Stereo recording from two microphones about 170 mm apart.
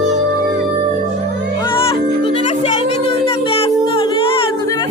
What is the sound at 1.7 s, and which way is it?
Music, 30° left (ahead or behind).